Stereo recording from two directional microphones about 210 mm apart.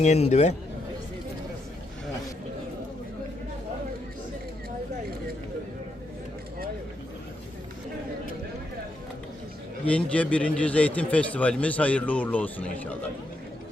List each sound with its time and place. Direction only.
0.0 s speech: 30° left (ahead or behind)
9.8 s speech: 5° left (ahead or behind)